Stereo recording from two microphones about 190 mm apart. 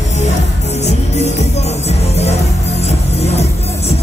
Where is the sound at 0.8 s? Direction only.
35° left (ahead or behind).